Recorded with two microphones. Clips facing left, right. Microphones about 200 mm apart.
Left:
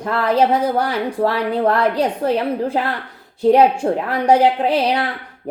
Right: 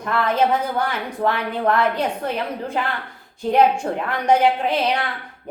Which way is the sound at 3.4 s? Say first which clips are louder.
Left 5 dB; 35° left (ahead or behind).